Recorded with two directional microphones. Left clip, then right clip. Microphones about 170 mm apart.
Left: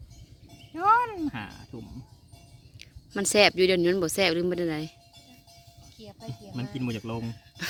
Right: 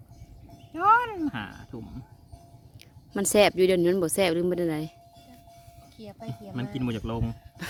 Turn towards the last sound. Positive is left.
turn(degrees=-5)  # may be behind; listen again after turning